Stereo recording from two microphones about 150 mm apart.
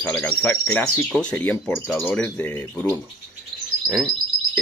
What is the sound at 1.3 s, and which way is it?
Speech, 10° left (ahead or behind).